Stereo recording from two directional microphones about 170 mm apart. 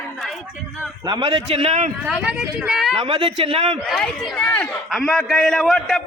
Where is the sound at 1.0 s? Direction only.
25° right (ahead or behind).